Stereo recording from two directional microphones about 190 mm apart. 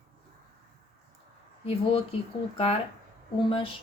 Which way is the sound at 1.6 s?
30° left (ahead or behind).